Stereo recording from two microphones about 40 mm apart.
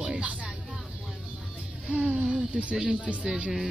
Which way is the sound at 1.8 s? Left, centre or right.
Right.